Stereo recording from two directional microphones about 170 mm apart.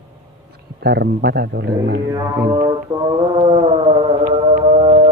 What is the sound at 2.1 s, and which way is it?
Music, 25° right (ahead or behind).